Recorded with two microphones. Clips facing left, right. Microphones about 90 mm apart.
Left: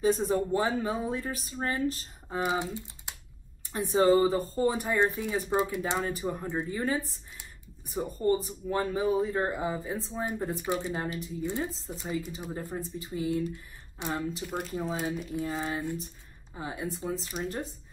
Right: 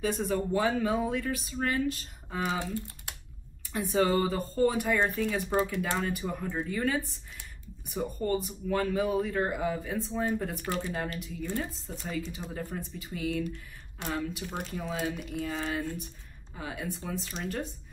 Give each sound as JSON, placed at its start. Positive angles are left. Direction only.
{"t": 0.0, "sound": "speech", "side_deg": 30}
{"t": 2.4, "sound": "speech", "side_deg": 20}
{"t": 14.4, "sound": "speech", "side_deg": 0}
{"t": 14.7, "sound": "speech", "side_deg": 30}
{"t": 15.0, "sound": "speech", "side_deg": 0}
{"t": 15.6, "sound": "speech", "side_deg": 20}